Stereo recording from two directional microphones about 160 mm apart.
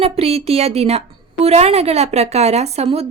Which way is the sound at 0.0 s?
40° right (ahead or behind).